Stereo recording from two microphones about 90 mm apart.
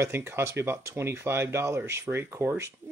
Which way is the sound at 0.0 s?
30° right (ahead or behind).